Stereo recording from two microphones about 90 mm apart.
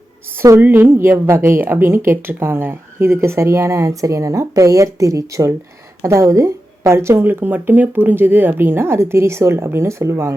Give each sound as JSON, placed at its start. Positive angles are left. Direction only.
{"t": 0.6, "sound": "speech", "side_deg": -25}